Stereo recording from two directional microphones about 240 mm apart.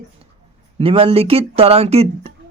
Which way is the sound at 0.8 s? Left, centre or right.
Right.